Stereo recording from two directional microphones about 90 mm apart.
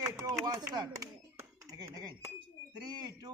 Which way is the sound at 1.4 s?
45° right (ahead or behind).